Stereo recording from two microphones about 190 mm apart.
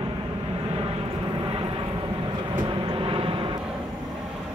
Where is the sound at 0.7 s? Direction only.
30° right (ahead or behind).